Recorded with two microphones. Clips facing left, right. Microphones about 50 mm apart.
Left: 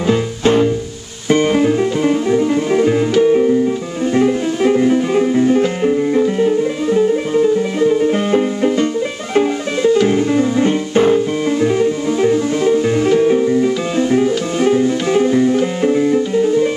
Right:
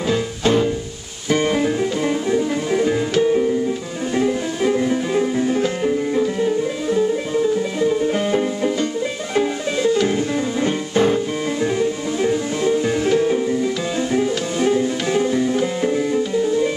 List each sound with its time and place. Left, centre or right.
1.3 s music: centre
9.9 s music: centre